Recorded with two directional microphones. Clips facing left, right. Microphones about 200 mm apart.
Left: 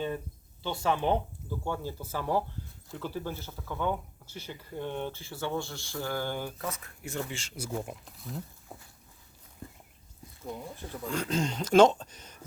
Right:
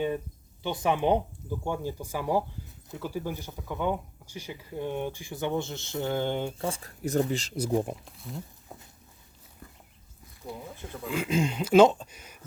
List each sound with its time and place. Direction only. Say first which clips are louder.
0.6 s speech: right 3 dB; 15° right (ahead or behind); by 7.5 s 40° right (ahead or behind)
8.0 s speech: even; centre (ahead or behind)
8.7 s walk: right 1 dB; centre (ahead or behind)
10.4 s speech: even; 15° right (ahead or behind)